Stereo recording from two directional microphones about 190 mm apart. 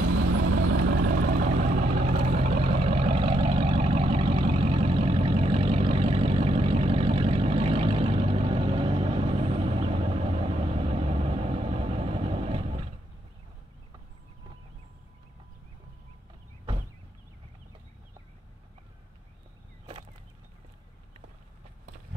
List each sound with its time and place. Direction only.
0.9 s vehicle: 45° right (ahead or behind); by 12.9 s 30° right (ahead or behind)